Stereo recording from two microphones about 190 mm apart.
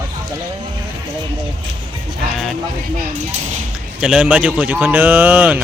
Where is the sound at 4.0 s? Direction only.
5° right (ahead or behind).